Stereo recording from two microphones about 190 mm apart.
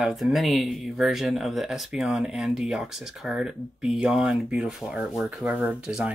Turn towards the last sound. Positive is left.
turn(degrees=-5)  # may be behind; listen again after turning